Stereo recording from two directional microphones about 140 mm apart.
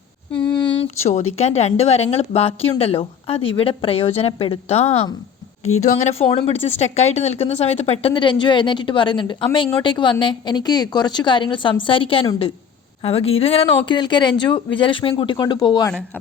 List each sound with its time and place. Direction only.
0.4 s a woman's voice: 35° left (ahead or behind)